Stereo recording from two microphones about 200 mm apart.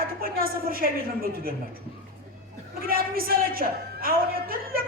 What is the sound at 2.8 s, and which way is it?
A man's voice, 45° right (ahead or behind).